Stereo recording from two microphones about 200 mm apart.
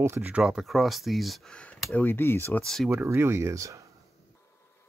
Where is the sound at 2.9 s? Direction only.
15° right (ahead or behind).